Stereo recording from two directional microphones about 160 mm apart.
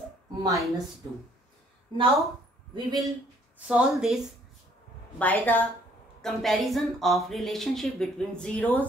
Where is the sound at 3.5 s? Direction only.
5° right (ahead or behind).